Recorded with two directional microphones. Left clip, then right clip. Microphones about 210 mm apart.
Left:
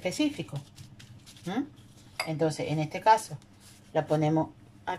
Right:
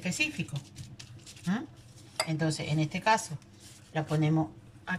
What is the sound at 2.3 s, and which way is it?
Speech, 20° left (ahead or behind).